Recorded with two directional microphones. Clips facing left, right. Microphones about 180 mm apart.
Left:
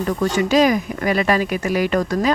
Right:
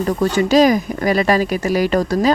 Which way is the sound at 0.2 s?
35° right (ahead or behind).